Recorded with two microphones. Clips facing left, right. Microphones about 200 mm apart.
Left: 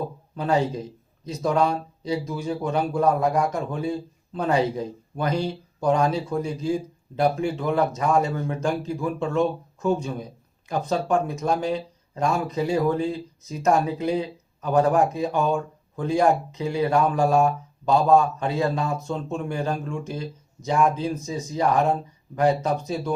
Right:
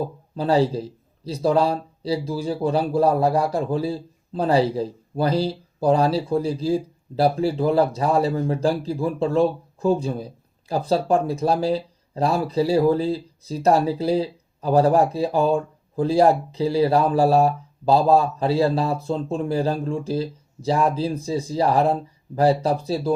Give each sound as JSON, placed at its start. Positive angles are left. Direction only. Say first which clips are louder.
{"t": 0.3, "sound": "a man's voice", "louder": "right 4 dB", "side_deg": -30}